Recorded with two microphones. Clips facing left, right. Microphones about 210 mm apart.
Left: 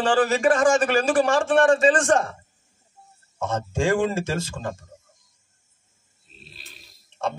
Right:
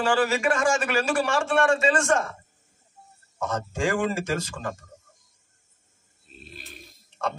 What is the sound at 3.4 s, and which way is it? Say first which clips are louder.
A man's voice: left 3 dB; 25° left (ahead or behind).